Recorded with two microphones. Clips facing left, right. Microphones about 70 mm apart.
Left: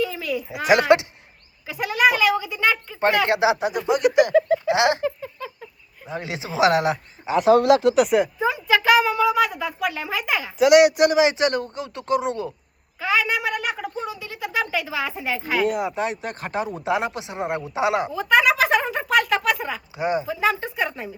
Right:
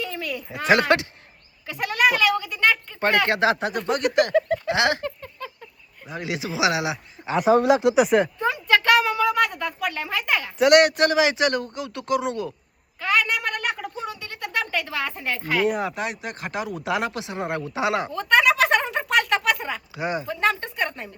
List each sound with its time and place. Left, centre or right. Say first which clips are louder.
0.0 s speech: left 5 dB; centre
1.6 s speech: left 2 dB; centre
3.2 s speech: left 1 dB; centre
3.5 s speech: left 2 dB; centre
4.7 s speech: left 2 dB; left
5.0 s a sound: left 5 dB; centre
6.1 s speech: right 1 dB; left
7.9 s speech: even; centre; by 12.5 s left
13.0 s a sound: left 1 dB; centre
16.0 s speech: left 3 dB; left
18.1 s a sound: right 1 dB; centre
20.0 s speech: left 4 dB; left
20.2 s speech: left 1 dB; centre